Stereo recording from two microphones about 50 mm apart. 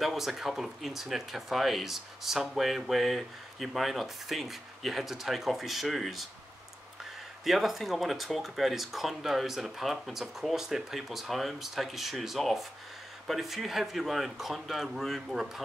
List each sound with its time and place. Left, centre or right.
0.0 s speech: centre
7.4 s speech: centre
10.5 s speech: centre